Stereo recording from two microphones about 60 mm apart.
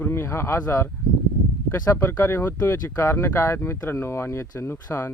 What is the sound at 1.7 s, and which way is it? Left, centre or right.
Speech, left.